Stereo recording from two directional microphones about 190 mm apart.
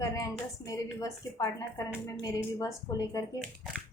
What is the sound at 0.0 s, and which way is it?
A woman's voice, 20° left (ahead or behind).